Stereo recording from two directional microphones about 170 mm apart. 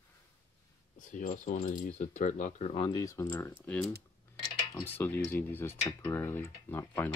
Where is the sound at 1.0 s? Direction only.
50° left (ahead or behind).